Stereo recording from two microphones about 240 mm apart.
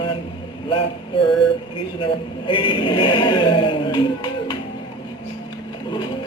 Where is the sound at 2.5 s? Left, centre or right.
Left.